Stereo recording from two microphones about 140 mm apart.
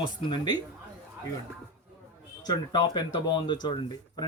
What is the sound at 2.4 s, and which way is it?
Speech, 30° left (ahead or behind).